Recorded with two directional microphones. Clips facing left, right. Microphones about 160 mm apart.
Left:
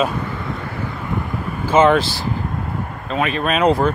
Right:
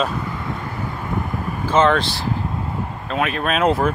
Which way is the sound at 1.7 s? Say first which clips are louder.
Left 3 dB; 5° left (ahead or behind).